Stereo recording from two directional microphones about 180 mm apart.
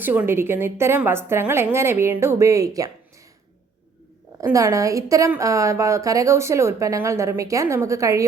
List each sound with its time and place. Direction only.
0.0 s a woman's voice: 10° right (ahead or behind)
4.4 s a woman's voice: 15° right (ahead or behind)